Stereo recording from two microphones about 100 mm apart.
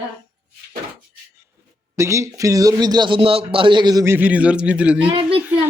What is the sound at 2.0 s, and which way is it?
A man's voice, 30° right (ahead or behind).